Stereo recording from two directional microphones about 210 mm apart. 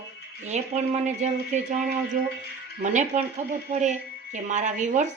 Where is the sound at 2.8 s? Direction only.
35° right (ahead or behind).